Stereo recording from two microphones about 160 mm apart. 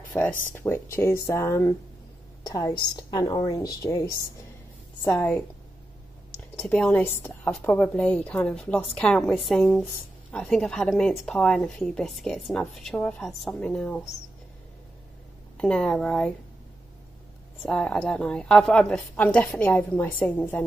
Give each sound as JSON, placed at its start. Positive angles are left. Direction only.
{"t": 0.1, "sound": "a woman's voice", "side_deg": 10}
{"t": 5.0, "sound": "a woman's voice", "side_deg": 15}
{"t": 6.6, "sound": "a woman's voice", "side_deg": 5}
{"t": 15.5, "sound": "a woman's voice", "side_deg": 5}
{"t": 17.6, "sound": "a woman's voice", "side_deg": 5}